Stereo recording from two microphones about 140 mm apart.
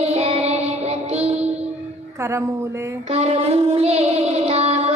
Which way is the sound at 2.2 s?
20° right (ahead or behind).